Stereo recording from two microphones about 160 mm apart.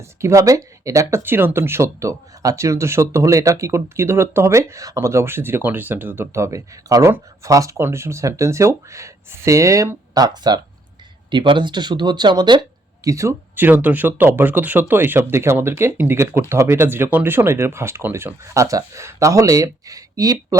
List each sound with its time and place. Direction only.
0.0 s speech: 20° right (ahead or behind)